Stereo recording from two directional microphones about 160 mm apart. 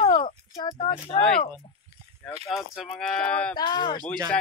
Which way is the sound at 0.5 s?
30° left (ahead or behind).